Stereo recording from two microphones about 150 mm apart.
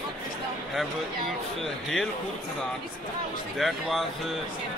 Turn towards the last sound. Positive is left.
turn(degrees=0)  # may be behind; listen again after turning